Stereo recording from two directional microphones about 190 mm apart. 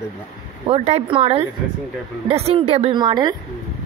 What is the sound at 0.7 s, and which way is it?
A woman's voice, 30° right (ahead or behind).